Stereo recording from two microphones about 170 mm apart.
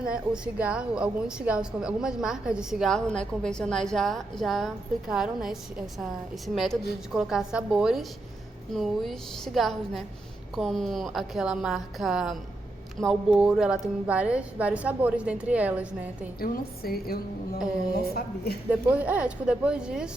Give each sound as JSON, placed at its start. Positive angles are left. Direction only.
{"t": 0.0, "sound": "a woman's voice", "side_deg": -5}
{"t": 16.4, "sound": "a woman's voice", "side_deg": 60}
{"t": 18.7, "sound": "a woman's voice", "side_deg": -10}